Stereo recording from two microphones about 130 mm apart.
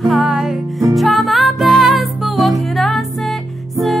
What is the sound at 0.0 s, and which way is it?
Music, centre (ahead or behind).